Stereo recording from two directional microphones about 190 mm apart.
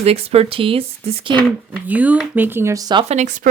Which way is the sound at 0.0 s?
30° right (ahead or behind).